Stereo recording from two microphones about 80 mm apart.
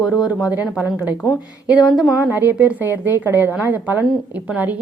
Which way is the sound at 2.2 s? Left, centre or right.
Right.